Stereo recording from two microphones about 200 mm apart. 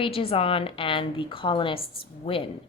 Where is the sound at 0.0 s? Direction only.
25° left (ahead or behind).